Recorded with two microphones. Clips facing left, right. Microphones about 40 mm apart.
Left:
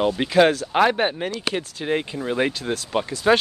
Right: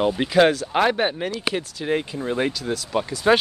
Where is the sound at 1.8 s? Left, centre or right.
Centre.